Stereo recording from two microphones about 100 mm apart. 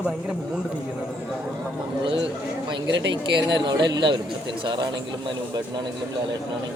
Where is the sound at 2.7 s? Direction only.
50° right (ahead or behind).